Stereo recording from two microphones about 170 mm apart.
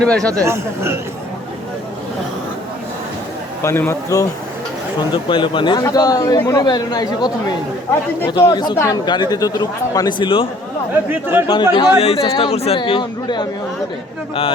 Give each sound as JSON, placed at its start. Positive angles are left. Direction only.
{"t": 0.0, "sound": "speech", "side_deg": 5}
{"t": 0.4, "sound": "speech", "side_deg": -15}
{"t": 3.6, "sound": "a man's voice", "side_deg": 15}
{"t": 5.1, "sound": "speech", "side_deg": 30}
{"t": 11.1, "sound": "speech", "side_deg": -10}
{"t": 11.4, "sound": "speech", "side_deg": 25}